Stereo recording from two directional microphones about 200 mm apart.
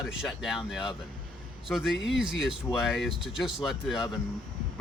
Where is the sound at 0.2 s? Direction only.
Centre (ahead or behind).